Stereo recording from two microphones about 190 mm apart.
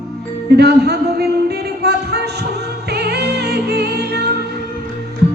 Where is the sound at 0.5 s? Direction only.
60° right (ahead or behind).